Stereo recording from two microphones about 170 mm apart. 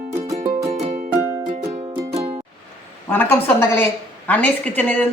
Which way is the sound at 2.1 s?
35° right (ahead or behind).